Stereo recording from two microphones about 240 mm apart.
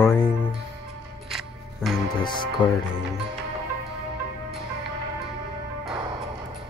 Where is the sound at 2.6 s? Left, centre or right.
Centre.